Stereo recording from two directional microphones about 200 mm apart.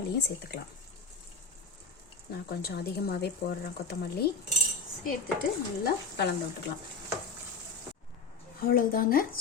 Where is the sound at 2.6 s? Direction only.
50° left (ahead or behind).